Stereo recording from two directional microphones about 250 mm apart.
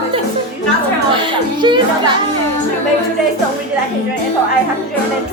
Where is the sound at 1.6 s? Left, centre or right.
Centre.